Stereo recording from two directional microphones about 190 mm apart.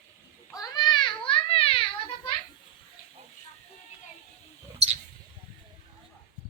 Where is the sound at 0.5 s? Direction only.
20° left (ahead or behind).